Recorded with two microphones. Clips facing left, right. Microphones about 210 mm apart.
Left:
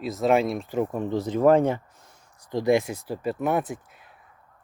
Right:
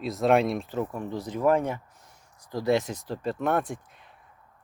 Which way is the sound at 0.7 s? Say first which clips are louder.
Left 5 dB; 20° left (ahead or behind).